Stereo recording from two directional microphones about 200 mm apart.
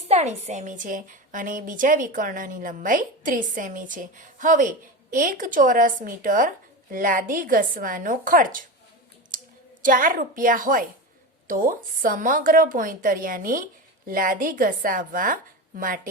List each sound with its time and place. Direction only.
0.1 s a woman's voice: 35° right (ahead or behind)
9.8 s a woman's voice: 45° right (ahead or behind)